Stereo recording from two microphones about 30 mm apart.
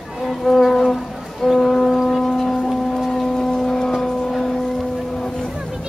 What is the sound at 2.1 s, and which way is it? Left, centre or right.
Foghorn, centre.